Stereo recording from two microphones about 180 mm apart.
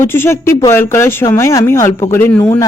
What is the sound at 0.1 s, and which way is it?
Speech, 15° left (ahead or behind).